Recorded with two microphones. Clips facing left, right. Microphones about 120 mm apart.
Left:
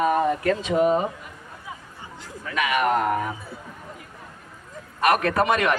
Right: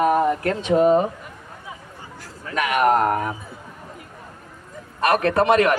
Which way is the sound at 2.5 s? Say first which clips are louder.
Right 4 dB; 50° right (ahead or behind).